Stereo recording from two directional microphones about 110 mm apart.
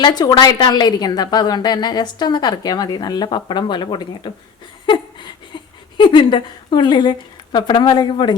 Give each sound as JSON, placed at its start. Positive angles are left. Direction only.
{"t": 0.0, "sound": "a woman's voice", "side_deg": 40}
{"t": 6.0, "sound": "a woman's voice", "side_deg": 45}